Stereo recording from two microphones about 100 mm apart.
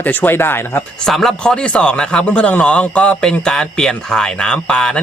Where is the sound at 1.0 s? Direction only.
5° left (ahead or behind).